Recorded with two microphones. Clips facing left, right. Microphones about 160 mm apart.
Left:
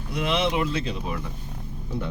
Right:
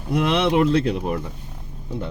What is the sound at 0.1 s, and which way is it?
Speech, 60° right (ahead or behind).